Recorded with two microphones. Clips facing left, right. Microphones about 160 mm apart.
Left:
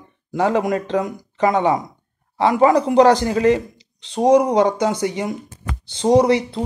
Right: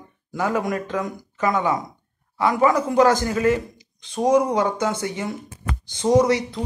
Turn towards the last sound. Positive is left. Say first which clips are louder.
# left 3 dB
turn(degrees=30)  # may be behind; listen again after turning